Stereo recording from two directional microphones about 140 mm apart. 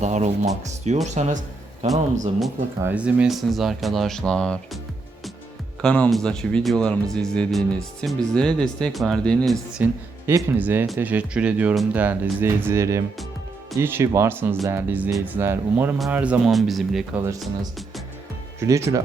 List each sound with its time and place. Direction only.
0.0 s a man's voice: 55° right (ahead or behind)
2.8 s speech: 10° right (ahead or behind); by 4.8 s 5° left (ahead or behind)
5.8 s speech: 5° left (ahead or behind)
9.7 s speech: 10° right (ahead or behind)
17.2 s speech: 20° right (ahead or behind)
18.6 s speech: 20° right (ahead or behind)